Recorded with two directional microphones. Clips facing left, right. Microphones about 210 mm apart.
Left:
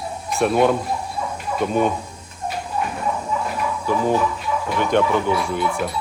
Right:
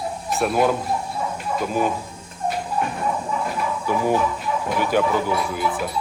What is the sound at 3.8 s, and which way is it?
Speech, 10° right (ahead or behind).